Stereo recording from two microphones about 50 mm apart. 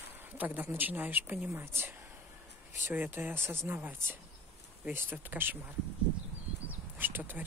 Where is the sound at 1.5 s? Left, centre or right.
Right.